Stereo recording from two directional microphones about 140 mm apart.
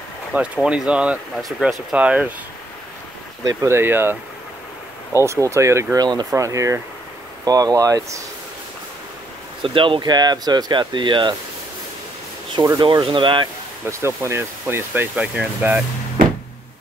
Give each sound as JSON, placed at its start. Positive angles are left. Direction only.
{"t": 0.3, "sound": "speech", "side_deg": -10}
{"t": 3.4, "sound": "speech", "side_deg": -20}
{"t": 9.6, "sound": "speech", "side_deg": -35}
{"t": 12.5, "sound": "speech", "side_deg": -35}
{"t": 13.8, "sound": "speech", "side_deg": -20}